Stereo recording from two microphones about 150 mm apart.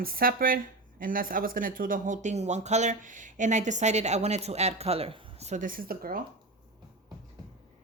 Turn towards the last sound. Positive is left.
turn(degrees=-80)